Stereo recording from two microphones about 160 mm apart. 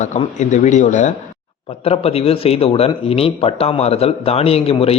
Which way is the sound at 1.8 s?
40° left (ahead or behind).